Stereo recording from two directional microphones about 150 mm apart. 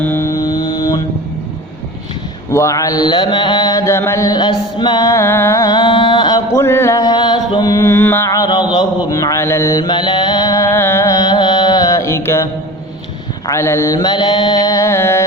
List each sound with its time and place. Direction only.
0.0 s mantra: 15° left (ahead or behind)
2.5 s mantra: 20° left (ahead or behind)
13.5 s mantra: 20° left (ahead or behind)